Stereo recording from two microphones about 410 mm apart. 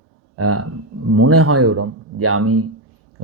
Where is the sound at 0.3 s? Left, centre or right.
Right.